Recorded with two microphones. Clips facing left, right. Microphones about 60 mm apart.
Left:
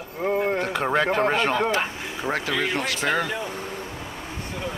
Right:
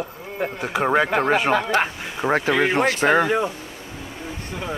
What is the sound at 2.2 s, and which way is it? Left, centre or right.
Speech, right.